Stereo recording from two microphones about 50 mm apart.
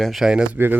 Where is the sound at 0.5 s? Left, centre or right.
Right.